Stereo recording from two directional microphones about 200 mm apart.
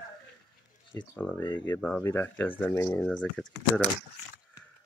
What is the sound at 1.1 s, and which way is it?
Speech, 5° left (ahead or behind).